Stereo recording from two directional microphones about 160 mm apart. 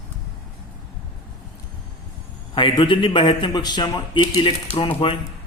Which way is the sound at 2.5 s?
30° left (ahead or behind).